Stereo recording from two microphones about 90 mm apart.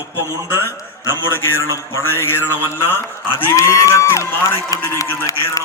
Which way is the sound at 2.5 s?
25° left (ahead or behind).